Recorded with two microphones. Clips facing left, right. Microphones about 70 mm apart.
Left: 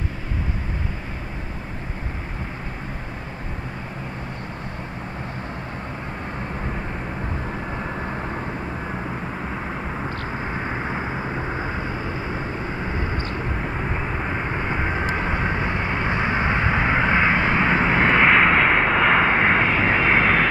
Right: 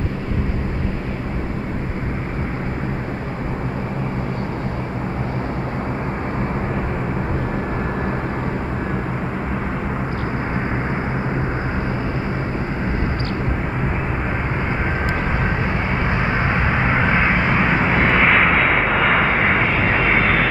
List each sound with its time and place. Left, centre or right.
15.3 s vehicle: right
16.6 s vehicle: centre
17.3 s vehicle: centre
17.9 s vehicle: centre